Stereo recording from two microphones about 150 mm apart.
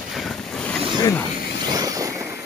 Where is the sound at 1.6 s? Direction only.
25° right (ahead or behind).